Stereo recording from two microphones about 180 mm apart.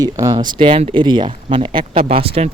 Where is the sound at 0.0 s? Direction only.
20° right (ahead or behind).